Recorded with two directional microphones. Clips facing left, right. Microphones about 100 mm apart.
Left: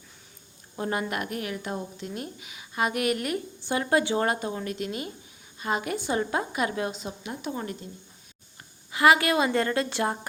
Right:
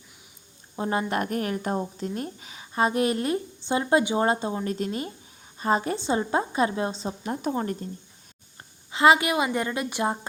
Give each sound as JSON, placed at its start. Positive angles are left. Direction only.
{"t": 0.8, "sound": "speech", "side_deg": -25}
{"t": 8.9, "sound": "a woman's voice", "side_deg": -25}